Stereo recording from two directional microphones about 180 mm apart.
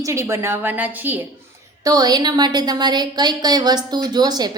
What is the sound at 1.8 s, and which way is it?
A woman's voice, 20° right (ahead or behind).